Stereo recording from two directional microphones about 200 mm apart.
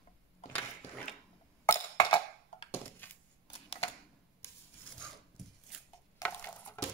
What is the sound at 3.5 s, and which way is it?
Camera, 30° left (ahead or behind).